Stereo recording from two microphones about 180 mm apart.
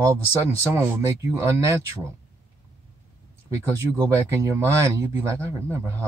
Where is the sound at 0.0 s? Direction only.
15° right (ahead or behind).